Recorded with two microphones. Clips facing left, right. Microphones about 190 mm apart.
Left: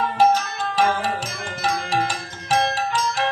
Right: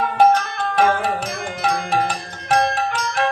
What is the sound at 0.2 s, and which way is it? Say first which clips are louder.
Music: right 3 dB; 55° right (ahead or behind).